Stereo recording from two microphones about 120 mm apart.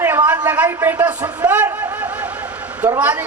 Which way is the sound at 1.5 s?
15° right (ahead or behind).